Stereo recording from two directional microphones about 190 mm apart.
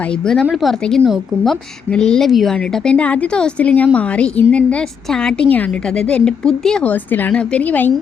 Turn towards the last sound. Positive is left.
turn(degrees=10)  # may be behind; listen again after turning